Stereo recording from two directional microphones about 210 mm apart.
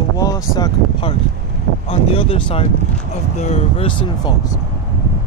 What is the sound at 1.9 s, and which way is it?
Speech, 25° left (ahead or behind).